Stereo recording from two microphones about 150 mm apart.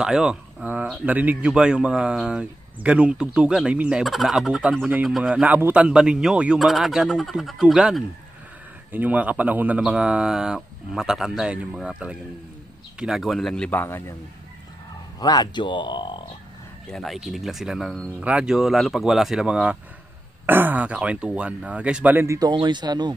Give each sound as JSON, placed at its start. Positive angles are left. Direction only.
{"t": 0.0, "sound": "speech", "side_deg": -5}
{"t": 15.1, "sound": "speech", "side_deg": 25}
{"t": 16.9, "sound": "speech", "side_deg": 0}